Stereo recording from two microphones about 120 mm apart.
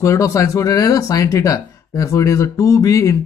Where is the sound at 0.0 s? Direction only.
25° left (ahead or behind).